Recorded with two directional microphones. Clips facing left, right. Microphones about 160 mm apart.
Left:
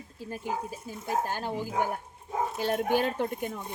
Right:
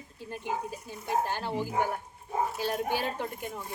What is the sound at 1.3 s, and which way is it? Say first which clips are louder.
Speech: even; 45° left (ahead or behind).